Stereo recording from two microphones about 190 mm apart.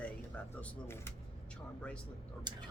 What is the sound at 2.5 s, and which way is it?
Speech, 25° right (ahead or behind).